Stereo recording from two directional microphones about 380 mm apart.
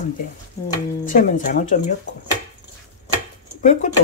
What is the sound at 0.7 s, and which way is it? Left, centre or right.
Speech, left.